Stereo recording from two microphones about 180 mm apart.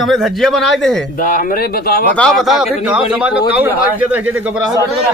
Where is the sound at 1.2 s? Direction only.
50° left (ahead or behind).